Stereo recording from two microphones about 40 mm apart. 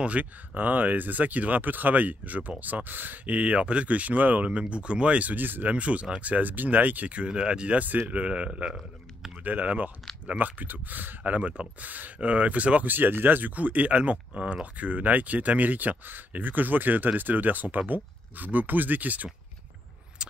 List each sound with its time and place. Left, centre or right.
0.0 s speech: right
0.6 s speech: right
3.3 s speech: right
4.5 s speech: right
5.3 s speech: right
5.8 s speech: right
7.8 s speech: right
9.4 s speech: right
12.8 s speech: right
13.6 s speech: right